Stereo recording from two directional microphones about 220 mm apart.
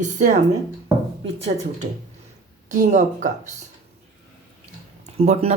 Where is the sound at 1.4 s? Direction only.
30° right (ahead or behind).